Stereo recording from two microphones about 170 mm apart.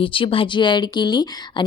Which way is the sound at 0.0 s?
30° left (ahead or behind).